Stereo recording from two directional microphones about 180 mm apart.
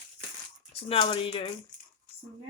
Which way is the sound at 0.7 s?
35° left (ahead or behind).